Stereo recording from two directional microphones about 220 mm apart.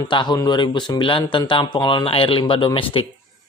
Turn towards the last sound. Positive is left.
turn(degrees=25)  # may be behind; listen again after turning